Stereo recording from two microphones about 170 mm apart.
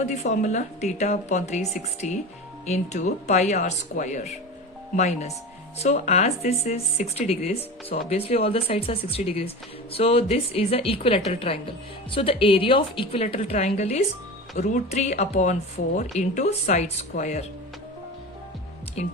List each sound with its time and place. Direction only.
0.0 s a woman's voice: 40° left (ahead or behind)
2.6 s a woman's voice: 40° left (ahead or behind)